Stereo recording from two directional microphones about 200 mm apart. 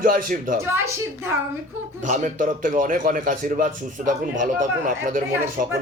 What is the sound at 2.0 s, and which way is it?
A man's voice, 40° right (ahead or behind).